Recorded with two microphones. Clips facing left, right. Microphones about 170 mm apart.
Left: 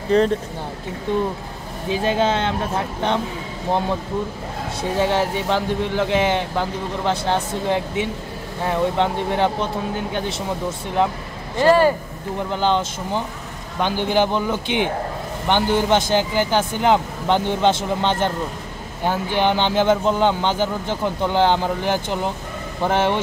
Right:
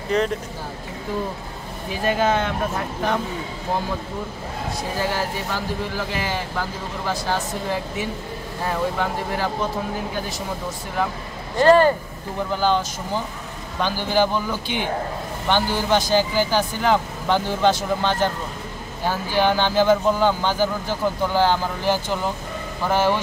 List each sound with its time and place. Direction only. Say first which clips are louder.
0.1 s speech: left 5 dB; 30° left (ahead or behind)
1.9 s speech: left 1 dB; 25° left (ahead or behind)
5.0 s speech: left 6 dB; 25° left (ahead or behind)
11.6 s speech: right 1 dB; 10° left (ahead or behind)
12.4 s speech: left 1 dB; 20° left (ahead or behind)